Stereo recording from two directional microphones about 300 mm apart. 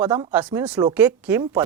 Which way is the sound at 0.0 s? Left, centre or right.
Centre.